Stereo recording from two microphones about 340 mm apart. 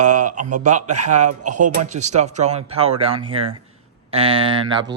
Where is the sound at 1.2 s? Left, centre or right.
Right.